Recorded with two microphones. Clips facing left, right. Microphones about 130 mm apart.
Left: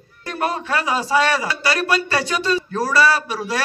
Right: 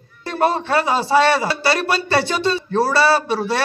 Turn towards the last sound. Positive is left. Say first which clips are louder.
# right 4 dB
turn(degrees=-30)  # may be behind; listen again after turning